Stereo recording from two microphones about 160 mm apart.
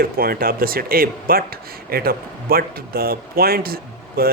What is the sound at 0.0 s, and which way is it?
Speech, 65° right (ahead or behind).